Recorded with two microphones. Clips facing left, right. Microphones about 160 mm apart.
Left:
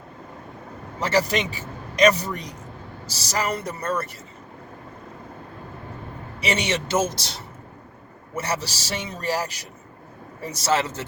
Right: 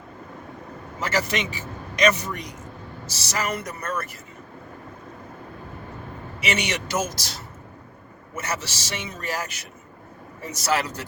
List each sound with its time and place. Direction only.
0.9 s a man's voice: 30° left (ahead or behind)
6.4 s a man's voice: 30° left (ahead or behind)